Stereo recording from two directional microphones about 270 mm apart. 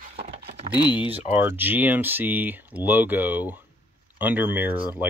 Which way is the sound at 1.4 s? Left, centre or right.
Centre.